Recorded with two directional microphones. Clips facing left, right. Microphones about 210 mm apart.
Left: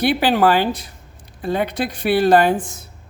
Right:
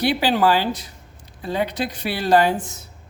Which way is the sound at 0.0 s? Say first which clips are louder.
Left 3 dB; 55° left (ahead or behind).